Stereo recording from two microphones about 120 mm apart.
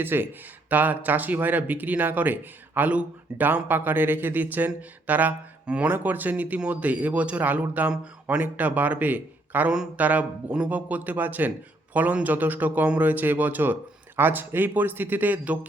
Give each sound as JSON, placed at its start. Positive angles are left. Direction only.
{"t": 0.0, "sound": "speech", "side_deg": -20}